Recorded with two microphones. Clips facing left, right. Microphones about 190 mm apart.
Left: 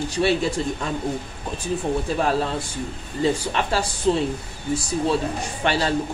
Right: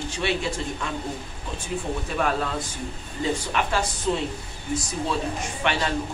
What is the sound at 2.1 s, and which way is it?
A man's voice, 30° left (ahead or behind).